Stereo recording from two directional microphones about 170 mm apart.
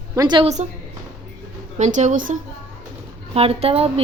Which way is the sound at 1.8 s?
45° right (ahead or behind).